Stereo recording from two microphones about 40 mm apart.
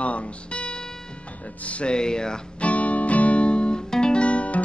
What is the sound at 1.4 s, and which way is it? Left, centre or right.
Speech, left.